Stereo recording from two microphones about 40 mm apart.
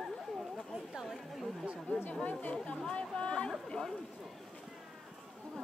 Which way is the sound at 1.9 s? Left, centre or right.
Left.